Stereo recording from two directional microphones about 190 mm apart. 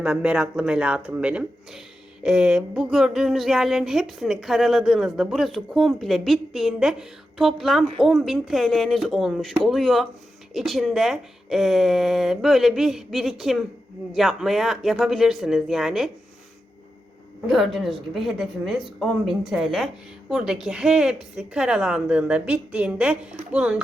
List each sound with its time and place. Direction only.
0.0 s speech: 5° right (ahead or behind)
17.4 s speech: centre (ahead or behind)